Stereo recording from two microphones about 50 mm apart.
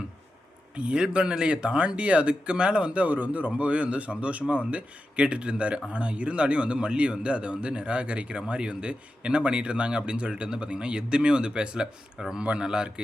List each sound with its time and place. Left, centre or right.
0.8 s speech: centre